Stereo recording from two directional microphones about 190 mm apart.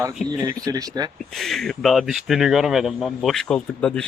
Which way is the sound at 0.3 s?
20° right (ahead or behind).